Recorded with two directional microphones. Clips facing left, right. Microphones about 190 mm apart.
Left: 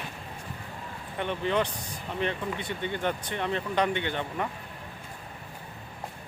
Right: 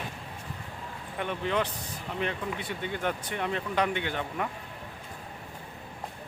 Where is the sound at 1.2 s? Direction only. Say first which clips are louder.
Left 2 dB; centre (ahead or behind).